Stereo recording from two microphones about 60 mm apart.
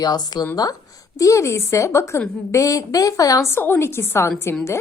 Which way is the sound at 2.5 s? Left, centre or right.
Left.